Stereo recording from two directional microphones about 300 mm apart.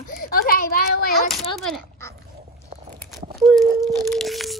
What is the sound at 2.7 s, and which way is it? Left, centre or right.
Walk, right.